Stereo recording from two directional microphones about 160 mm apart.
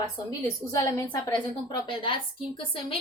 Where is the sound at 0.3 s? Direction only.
20° left (ahead or behind).